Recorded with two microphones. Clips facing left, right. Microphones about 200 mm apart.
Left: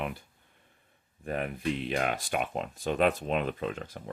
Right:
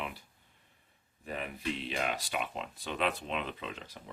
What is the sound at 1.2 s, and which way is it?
Speech, 55° left (ahead or behind).